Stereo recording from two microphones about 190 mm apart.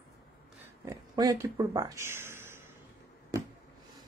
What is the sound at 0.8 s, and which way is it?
Speech, 20° right (ahead or behind).